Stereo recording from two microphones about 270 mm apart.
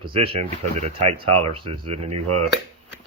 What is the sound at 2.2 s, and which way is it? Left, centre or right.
Speech, right.